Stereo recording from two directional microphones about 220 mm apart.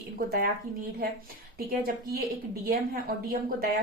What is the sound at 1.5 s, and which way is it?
Speech, 40° right (ahead or behind).